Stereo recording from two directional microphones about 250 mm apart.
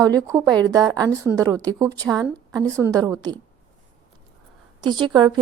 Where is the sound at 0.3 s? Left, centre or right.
Centre.